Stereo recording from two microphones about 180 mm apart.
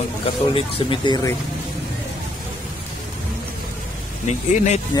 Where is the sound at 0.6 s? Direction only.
30° left (ahead or behind).